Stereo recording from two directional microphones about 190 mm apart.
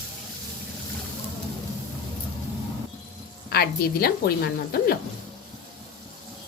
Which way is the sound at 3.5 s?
55° left (ahead or behind).